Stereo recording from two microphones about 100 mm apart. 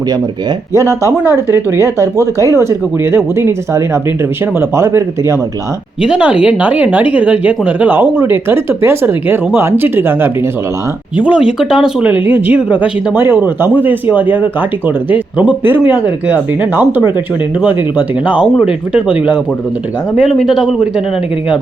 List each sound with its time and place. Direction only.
0.7 s speech: 30° right (ahead or behind)
6.0 s speech: 10° right (ahead or behind)
11.2 s speech: 10° right (ahead or behind)
12.1 s speech: 15° right (ahead or behind)
20.3 s a man's voice: centre (ahead or behind)